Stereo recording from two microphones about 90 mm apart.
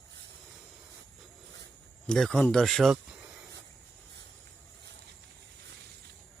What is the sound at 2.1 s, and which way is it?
Speech, 5° left (ahead or behind).